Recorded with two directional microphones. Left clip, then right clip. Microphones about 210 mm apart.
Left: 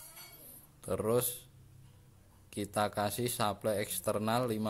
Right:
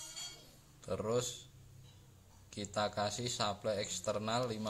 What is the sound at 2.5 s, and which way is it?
A man's voice, 55° left (ahead or behind).